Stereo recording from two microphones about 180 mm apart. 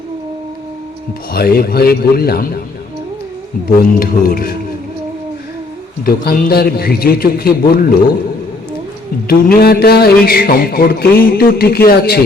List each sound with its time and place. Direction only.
1.3 s a man's voice: 55° left (ahead or behind)
3.7 s a man's voice: 55° left (ahead or behind)
6.1 s a man's voice: 60° left (ahead or behind)
9.2 s a man's voice: 55° left (ahead or behind)